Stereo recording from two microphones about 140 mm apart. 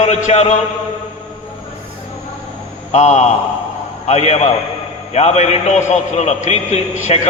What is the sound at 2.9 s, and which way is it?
A man's voice, 55° left (ahead or behind).